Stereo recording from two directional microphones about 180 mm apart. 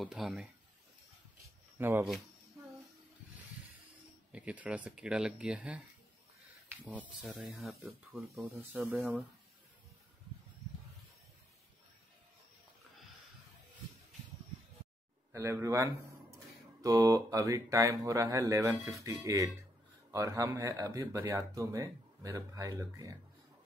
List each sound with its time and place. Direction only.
0.0 s speech: centre (ahead or behind)
1.4 s a sound: 10° right (ahead or behind)
4.3 s speech: 5° right (ahead or behind)
6.9 s speech: 5° right (ahead or behind)
8.5 s speech: 15° right (ahead or behind)
15.3 s speech: 15° right (ahead or behind)